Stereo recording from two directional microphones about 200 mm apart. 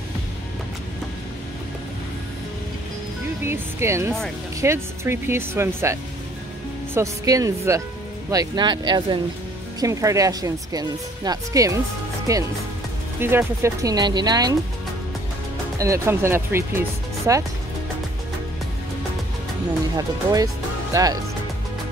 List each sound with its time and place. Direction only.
3.4 s speech: 15° right (ahead or behind)
15.8 s speech: 15° right (ahead or behind)
20.9 s speech: 20° right (ahead or behind)